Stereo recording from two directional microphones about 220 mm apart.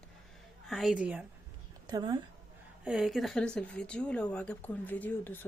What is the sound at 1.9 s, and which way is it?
Speech, 20° right (ahead or behind).